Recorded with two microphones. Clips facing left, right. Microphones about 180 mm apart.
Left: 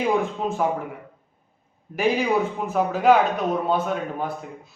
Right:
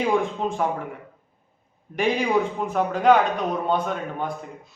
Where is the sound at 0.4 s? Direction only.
5° left (ahead or behind).